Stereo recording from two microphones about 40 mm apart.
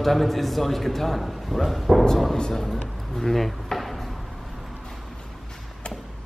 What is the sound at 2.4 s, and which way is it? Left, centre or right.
Speech, centre.